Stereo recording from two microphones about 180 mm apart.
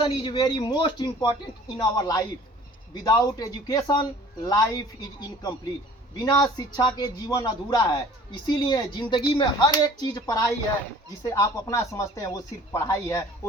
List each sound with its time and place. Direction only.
0.0 s speech: 25° left (ahead or behind)
6.2 s speech: 20° left (ahead or behind)